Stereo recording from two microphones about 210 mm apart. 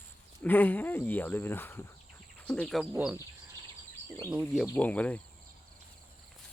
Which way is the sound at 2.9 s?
5° right (ahead or behind).